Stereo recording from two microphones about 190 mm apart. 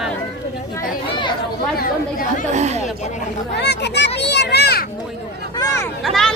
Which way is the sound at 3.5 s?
60° left (ahead or behind).